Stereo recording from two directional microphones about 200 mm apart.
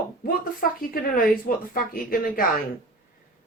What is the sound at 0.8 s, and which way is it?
Speech, 45° left (ahead or behind).